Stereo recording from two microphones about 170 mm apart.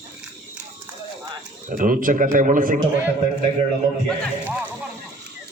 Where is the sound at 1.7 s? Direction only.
50° right (ahead or behind).